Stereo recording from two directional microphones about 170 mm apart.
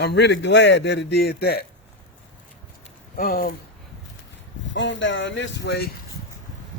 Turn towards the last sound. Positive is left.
turn(degrees=75)  # may be behind; listen again after turning